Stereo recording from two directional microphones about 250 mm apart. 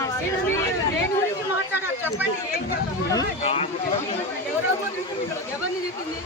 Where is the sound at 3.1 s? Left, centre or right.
Left.